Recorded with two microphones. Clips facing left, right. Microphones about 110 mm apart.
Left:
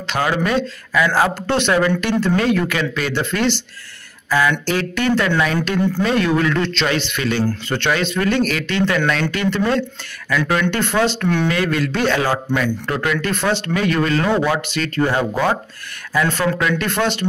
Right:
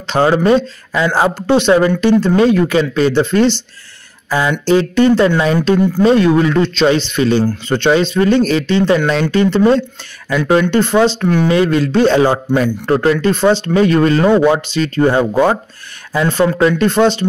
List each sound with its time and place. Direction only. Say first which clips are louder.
0.0 s speech: right 7 dB; 30° right (ahead or behind)
7.1 s speech: right 6 dB; 25° right (ahead or behind); by 11.4 s 10° right (ahead or behind)
11.4 s speech: right 6 dB; 25° right (ahead or behind)
13.3 s speech: right 8 dB; 20° right (ahead or behind)
13.7 s speech: right 6 dB; 30° right (ahead or behind)
16.5 s speech: right 8 dB; 30° right (ahead or behind)